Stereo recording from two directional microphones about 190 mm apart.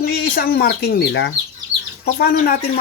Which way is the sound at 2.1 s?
55° left (ahead or behind).